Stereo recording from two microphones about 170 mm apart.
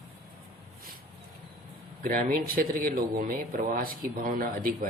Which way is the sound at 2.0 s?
55° right (ahead or behind).